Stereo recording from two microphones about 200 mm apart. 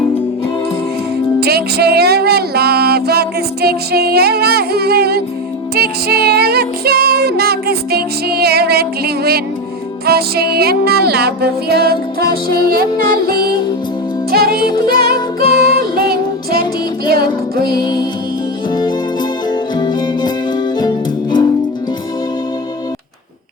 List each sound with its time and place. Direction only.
1.4 s music: 50° right (ahead or behind)
17.7 s music: 20° left (ahead or behind)
19.5 s music: 20° left (ahead or behind)